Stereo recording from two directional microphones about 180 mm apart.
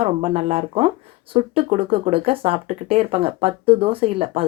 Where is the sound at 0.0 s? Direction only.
35° right (ahead or behind).